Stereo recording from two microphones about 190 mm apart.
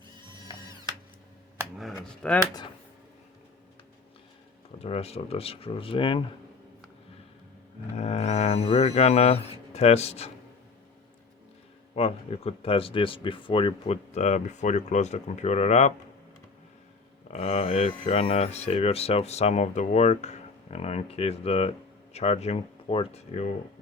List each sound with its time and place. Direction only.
0.2 s music: 20° right (ahead or behind)
1.8 s speech: 5° left (ahead or behind)
4.8 s speech: 35° left (ahead or behind)
7.9 s speech: 35° left (ahead or behind)
11.9 s speech: 30° left (ahead or behind)
17.3 s speech: 35° left (ahead or behind)